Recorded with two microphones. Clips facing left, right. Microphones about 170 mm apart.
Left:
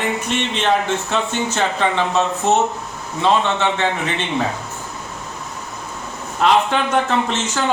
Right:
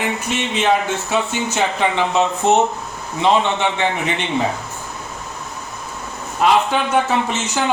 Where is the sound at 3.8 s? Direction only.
15° right (ahead or behind).